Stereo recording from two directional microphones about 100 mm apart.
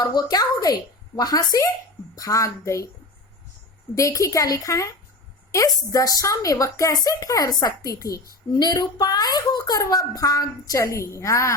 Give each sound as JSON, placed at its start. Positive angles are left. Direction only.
{"t": 0.0, "sound": "a child's voice", "side_deg": 45}
{"t": 3.9, "sound": "a child's voice", "side_deg": 35}